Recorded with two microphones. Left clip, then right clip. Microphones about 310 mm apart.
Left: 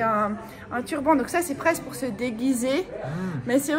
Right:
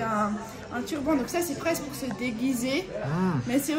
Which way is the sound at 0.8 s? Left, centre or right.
Centre.